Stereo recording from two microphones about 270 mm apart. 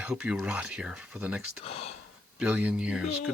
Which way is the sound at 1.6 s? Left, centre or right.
Left.